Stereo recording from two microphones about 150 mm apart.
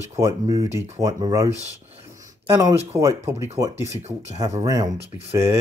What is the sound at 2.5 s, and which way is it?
Speech, 20° right (ahead or behind).